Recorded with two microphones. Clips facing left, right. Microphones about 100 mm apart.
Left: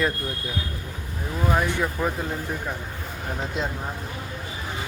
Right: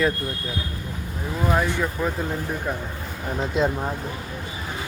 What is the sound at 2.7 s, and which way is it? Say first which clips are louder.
Speech: right 4 dB; 10° right (ahead or behind).